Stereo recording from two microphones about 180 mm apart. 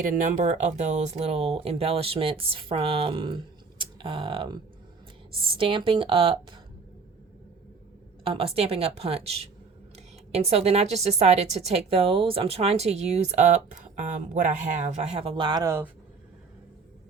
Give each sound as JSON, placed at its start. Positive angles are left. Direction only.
{"t": 0.0, "sound": "speech", "side_deg": -45}
{"t": 8.2, "sound": "speech", "side_deg": -30}